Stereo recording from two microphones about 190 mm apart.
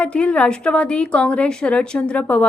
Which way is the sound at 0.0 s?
5° left (ahead or behind).